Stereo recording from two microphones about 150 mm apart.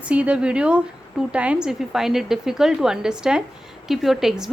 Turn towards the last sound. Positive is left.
turn(degrees=0)  # may be behind; listen again after turning